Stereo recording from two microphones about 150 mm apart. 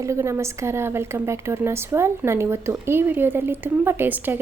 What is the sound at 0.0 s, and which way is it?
A woman's voice, 20° right (ahead or behind).